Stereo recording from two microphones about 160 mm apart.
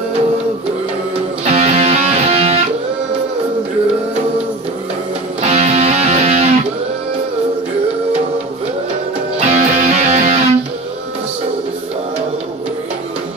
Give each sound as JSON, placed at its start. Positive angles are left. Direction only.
{"t": 1.4, "sound": "music", "side_deg": -40}
{"t": 5.5, "sound": "music", "side_deg": -40}
{"t": 9.4, "sound": "music", "side_deg": -45}